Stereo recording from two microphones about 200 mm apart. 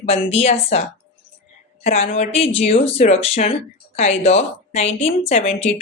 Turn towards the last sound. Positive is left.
turn(degrees=30)  # may be behind; listen again after turning